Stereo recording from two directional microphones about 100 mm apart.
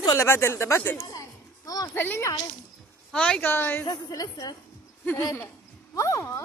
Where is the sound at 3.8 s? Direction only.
40° left (ahead or behind).